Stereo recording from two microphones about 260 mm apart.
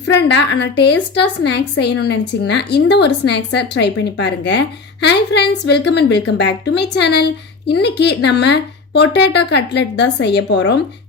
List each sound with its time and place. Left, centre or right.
0.0 s a woman's voice: left